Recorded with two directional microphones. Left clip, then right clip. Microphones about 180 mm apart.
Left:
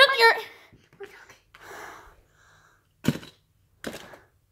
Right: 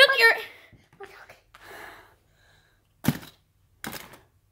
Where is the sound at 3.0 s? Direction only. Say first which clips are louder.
Even; 20° right (ahead or behind).